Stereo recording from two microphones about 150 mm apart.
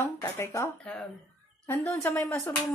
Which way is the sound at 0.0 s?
15° left (ahead or behind).